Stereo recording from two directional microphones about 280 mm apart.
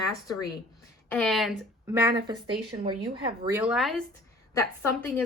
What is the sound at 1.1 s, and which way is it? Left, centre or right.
A woman's voice, centre.